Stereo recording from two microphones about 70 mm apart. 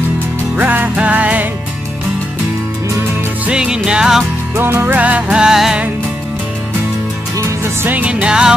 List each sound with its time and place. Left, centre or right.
0.6 s music: right
3.4 s music: centre
4.6 s music: right; by 5.8 s centre
7.8 s music: right